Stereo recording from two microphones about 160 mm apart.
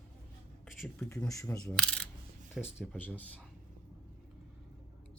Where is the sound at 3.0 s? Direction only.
10° left (ahead or behind).